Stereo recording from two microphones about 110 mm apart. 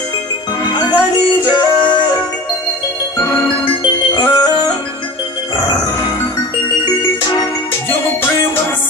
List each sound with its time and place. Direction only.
0.7 s music: 40° left (ahead or behind)
1.5 s yodeling: 40° left (ahead or behind)
4.1 s music: 40° left (ahead or behind)